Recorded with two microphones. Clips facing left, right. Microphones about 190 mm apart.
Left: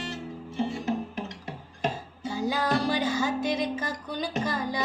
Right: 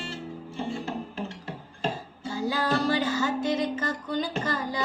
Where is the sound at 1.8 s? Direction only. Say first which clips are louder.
Left 1 dB; 15° left (ahead or behind).